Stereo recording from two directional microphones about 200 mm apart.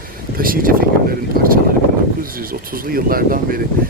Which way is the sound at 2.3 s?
45° right (ahead or behind).